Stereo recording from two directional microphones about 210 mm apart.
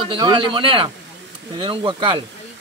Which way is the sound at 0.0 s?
25° right (ahead or behind).